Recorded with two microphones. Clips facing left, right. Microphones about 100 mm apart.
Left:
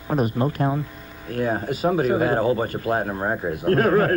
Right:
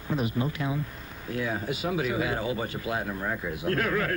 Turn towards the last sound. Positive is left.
turn(degrees=45)  # may be behind; listen again after turning